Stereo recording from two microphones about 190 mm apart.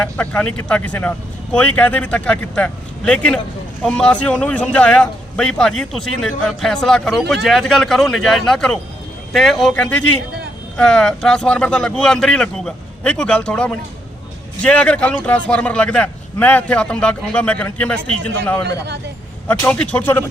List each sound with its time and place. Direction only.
0.2 s a man's voice: 5° left (ahead or behind)
18.6 s speech: 60° right (ahead or behind)
19.5 s a man's voice: 10° left (ahead or behind)